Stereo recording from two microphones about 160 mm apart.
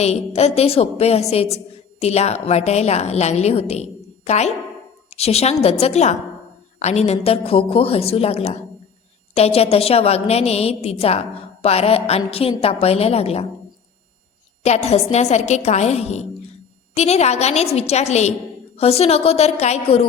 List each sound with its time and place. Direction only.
0.0 s a woman's voice: 40° left (ahead or behind)
14.6 s a woman's voice: 40° left (ahead or behind)